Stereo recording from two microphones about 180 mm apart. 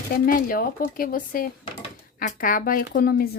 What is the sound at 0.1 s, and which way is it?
Speech, 50° left (ahead or behind).